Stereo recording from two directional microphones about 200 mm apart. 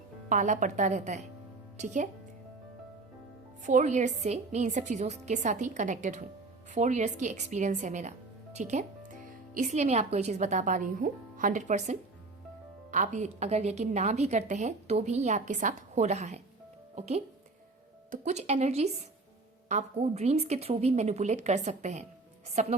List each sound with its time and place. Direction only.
0.3 s a woman's voice: 40° right (ahead or behind)
3.7 s a woman's voice: 35° right (ahead or behind)
8.5 s music: 35° right (ahead or behind)
9.6 s a woman's voice: 35° right (ahead or behind)